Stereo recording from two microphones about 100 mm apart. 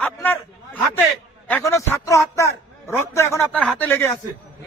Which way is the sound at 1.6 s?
30° left (ahead or behind).